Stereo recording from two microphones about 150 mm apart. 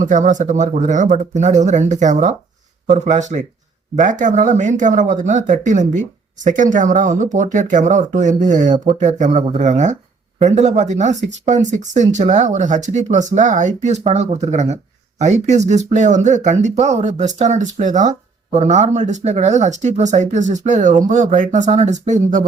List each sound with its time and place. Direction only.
0.0 s speech: 60° right (ahead or behind)